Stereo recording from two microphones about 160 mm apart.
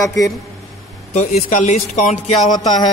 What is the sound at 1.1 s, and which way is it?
A man's voice, 50° left (ahead or behind).